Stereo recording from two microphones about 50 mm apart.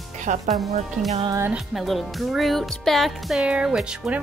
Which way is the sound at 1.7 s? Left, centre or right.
Centre.